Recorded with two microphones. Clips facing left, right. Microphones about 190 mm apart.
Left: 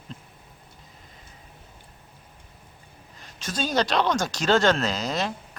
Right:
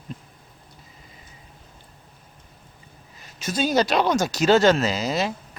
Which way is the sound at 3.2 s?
10° right (ahead or behind).